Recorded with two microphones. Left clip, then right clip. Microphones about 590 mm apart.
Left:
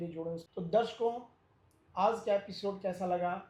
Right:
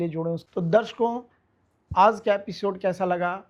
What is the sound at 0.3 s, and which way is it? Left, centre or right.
Speech, right.